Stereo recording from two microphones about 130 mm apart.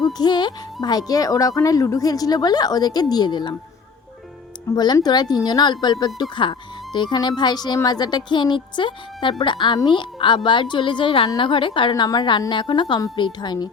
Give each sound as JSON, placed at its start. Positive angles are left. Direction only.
{"t": 0.2, "sound": "speech", "side_deg": 35}
{"t": 4.7, "sound": "speech", "side_deg": 30}